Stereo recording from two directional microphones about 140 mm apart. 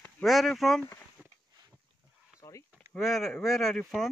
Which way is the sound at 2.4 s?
25° left (ahead or behind).